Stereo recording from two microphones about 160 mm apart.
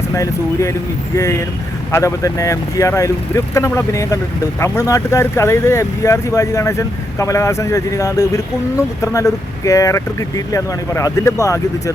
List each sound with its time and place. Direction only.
0.1 s speech: 20° left (ahead or behind)